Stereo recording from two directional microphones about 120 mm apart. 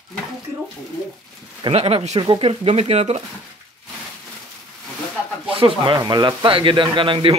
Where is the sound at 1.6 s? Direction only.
55° right (ahead or behind).